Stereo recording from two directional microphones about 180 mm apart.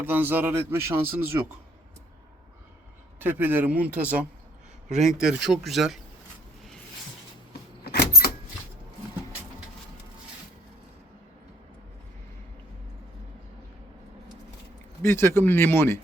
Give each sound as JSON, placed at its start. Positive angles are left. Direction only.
{"t": 0.0, "sound": "speech", "side_deg": -10}
{"t": 3.2, "sound": "speech", "side_deg": -10}
{"t": 7.9, "sound": "vehicle", "side_deg": 60}
{"t": 15.0, "sound": "speech", "side_deg": 15}